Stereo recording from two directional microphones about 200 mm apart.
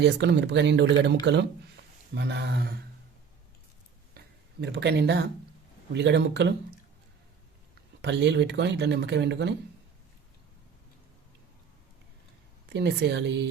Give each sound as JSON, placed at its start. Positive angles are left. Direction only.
{"t": 0.0, "sound": "speech", "side_deg": -60}
{"t": 4.6, "sound": "speech", "side_deg": -55}
{"t": 8.0, "sound": "speech", "side_deg": -60}
{"t": 12.7, "sound": "speech", "side_deg": -60}